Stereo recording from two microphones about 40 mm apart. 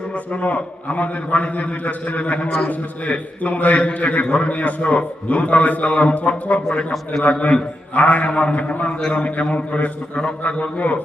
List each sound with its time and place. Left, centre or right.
0.3 s a man's voice: left